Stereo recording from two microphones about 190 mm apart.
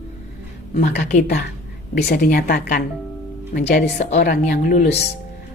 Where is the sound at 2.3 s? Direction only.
45° left (ahead or behind).